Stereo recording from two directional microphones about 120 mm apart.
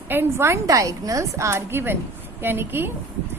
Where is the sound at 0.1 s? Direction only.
20° right (ahead or behind).